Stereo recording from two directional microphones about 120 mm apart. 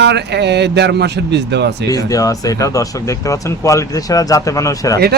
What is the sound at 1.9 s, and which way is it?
Speech, 30° left (ahead or behind).